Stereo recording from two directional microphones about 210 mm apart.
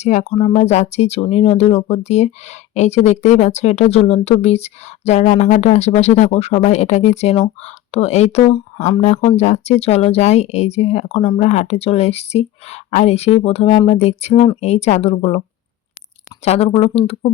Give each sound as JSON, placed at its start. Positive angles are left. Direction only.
{"t": 0.0, "sound": "speech", "side_deg": 35}
{"t": 16.4, "sound": "speech", "side_deg": 30}